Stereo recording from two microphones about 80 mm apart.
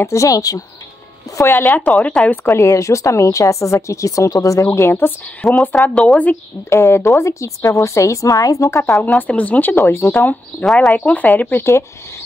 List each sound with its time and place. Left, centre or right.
0.0 s speech: left
1.4 s speech: left
1.7 s speech: centre
2.4 s speech: left
4.6 s speech: left
5.4 s speech: centre
6.7 s speech: left
9.0 s speech: centre; by 10.2 s left
10.6 s speech: centre
11.0 s speech: centre
11.5 s speech: left